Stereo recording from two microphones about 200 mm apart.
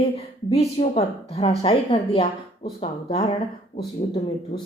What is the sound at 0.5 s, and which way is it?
Speech, 30° left (ahead or behind).